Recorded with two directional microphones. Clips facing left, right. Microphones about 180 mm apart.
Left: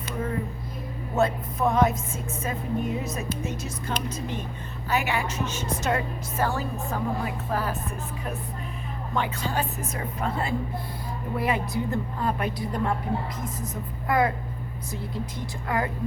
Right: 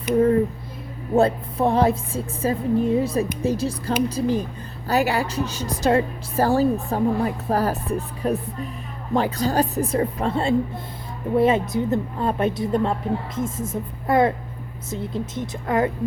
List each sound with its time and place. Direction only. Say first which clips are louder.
1.1 s a woman's voice: right 6 dB; 30° right (ahead or behind)